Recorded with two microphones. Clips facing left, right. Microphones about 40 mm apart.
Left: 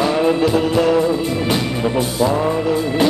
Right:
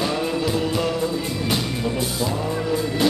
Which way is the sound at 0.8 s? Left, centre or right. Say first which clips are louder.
Left 8 dB; left.